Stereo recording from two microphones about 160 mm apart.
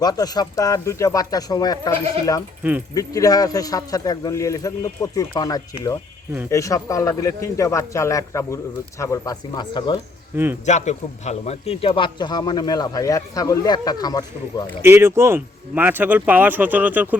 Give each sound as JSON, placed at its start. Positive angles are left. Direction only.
{"t": 0.0, "sound": "a man's voice", "side_deg": 25}
{"t": 2.9, "sound": "a man's voice", "side_deg": 20}
{"t": 10.3, "sound": "speech", "side_deg": -15}
{"t": 10.7, "sound": "a man's voice", "side_deg": 45}
{"t": 14.8, "sound": "speech", "side_deg": -15}